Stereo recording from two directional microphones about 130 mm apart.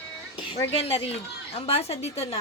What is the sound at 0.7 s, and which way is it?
Speech, 50° left (ahead or behind).